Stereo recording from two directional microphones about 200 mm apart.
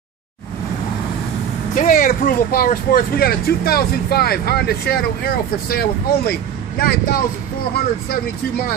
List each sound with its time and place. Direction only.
1.8 s speech: 45° left (ahead or behind)